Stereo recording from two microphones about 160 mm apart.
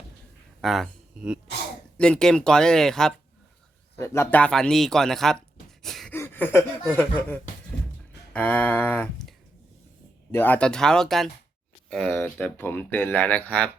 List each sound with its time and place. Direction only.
0.6 s speech: centre (ahead or behind)
3.9 s speech: 15° left (ahead or behind)
5.8 s a sound: centre (ahead or behind)
6.1 s a sound: 15° left (ahead or behind)
6.9 s speech: 10° left (ahead or behind)
10.3 s speech: 10° left (ahead or behind)